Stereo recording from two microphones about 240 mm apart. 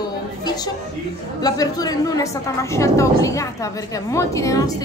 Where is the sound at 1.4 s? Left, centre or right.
Centre.